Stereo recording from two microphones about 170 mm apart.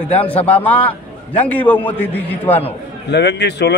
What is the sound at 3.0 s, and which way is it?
Speech, 90° left.